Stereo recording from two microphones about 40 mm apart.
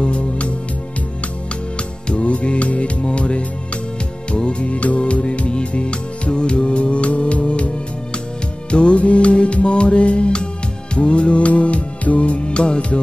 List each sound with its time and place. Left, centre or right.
0.0 s music: left
2.0 s music: left